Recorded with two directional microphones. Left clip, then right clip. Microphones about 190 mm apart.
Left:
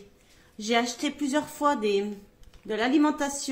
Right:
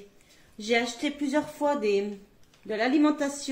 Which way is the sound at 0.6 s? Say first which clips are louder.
Even; 40° left (ahead or behind).